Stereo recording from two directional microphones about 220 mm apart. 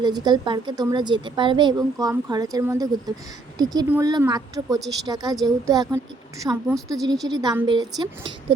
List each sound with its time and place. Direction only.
0.0 s a woman's voice: 20° right (ahead or behind)